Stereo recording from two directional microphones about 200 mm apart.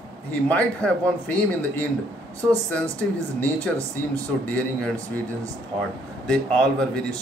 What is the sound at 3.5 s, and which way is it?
Speech, 15° right (ahead or behind).